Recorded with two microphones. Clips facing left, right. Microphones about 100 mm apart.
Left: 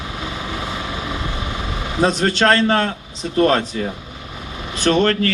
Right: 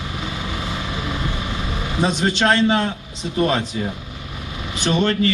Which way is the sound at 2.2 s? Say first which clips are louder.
Even; 50° left (ahead or behind).